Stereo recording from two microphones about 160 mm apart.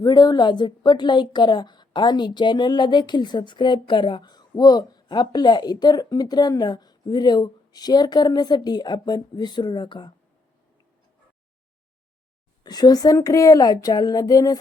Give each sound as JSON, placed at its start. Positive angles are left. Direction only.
{"t": 0.0, "sound": "a woman's voice", "side_deg": 25}
{"t": 12.6, "sound": "a woman's voice", "side_deg": 25}